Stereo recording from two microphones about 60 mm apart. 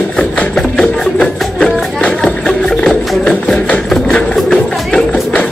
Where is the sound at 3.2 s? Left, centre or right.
Centre.